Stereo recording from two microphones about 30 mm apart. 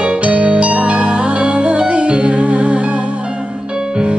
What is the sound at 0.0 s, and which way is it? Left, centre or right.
Music, right.